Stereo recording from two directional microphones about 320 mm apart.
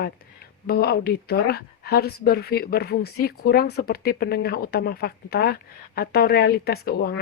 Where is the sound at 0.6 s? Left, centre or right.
Left.